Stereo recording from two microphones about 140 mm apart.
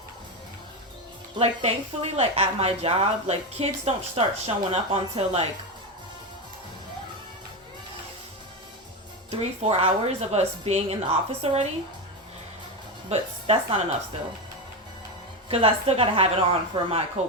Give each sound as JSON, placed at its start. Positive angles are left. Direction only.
{"t": 1.4, "sound": "speech", "side_deg": -45}
{"t": 9.4, "sound": "speech", "side_deg": -50}
{"t": 13.1, "sound": "speech", "side_deg": -45}
{"t": 15.4, "sound": "speech", "side_deg": -45}
{"t": 17.2, "sound": "speech", "side_deg": -55}